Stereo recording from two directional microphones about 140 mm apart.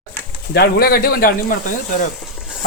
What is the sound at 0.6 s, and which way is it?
Speech, 90° left.